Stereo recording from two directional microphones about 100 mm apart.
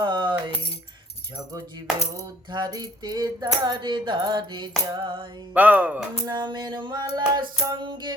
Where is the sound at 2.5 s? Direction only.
45° right (ahead or behind).